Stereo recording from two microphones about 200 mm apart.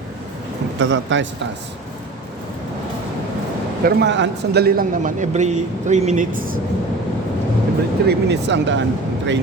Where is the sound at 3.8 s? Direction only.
60° right (ahead or behind); by 6.5 s 45° right (ahead or behind).